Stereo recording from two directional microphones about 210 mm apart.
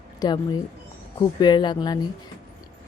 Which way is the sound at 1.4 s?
20° left (ahead or behind).